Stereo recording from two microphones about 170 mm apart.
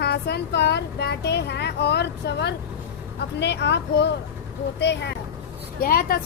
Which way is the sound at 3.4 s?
90° left.